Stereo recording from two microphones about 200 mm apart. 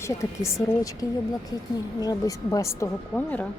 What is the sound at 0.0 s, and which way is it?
A woman's voice, 15° left (ahead or behind).